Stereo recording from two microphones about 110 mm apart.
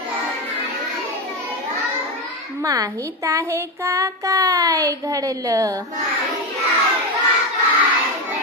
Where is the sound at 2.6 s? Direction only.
30° right (ahead or behind).